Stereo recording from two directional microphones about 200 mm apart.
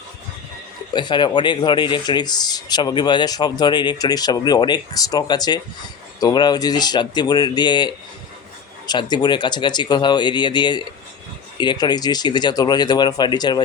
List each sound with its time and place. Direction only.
0.9 s speech: 25° left (ahead or behind)